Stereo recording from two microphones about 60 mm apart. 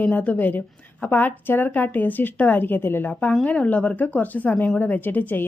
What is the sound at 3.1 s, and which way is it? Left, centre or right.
Speech, left.